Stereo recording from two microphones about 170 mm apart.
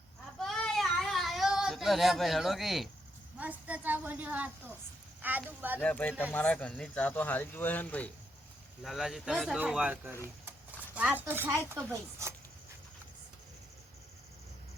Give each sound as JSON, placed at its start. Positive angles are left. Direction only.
{"t": 0.3, "sound": "child singing", "side_deg": 0}
{"t": 3.3, "sound": "a woman's voice", "side_deg": -10}
{"t": 5.8, "sound": "a woman's voice", "side_deg": 5}